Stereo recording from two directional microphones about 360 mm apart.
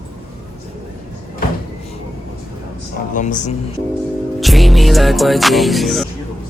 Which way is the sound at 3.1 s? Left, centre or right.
Left.